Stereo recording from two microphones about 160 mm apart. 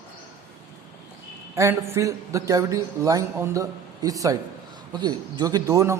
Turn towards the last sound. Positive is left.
turn(degrees=-20)  # may be behind; listen again after turning